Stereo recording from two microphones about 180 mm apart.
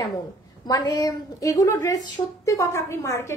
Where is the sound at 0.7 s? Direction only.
20° left (ahead or behind).